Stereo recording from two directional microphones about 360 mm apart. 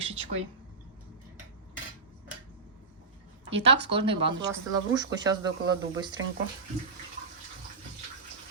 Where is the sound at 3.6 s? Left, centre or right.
Right.